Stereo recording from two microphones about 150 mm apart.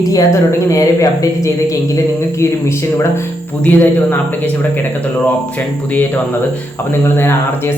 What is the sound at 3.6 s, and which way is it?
Speech, 10° left (ahead or behind).